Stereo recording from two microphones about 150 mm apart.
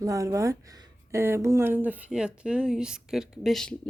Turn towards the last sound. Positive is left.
turn(degrees=5)  # may be behind; listen again after turning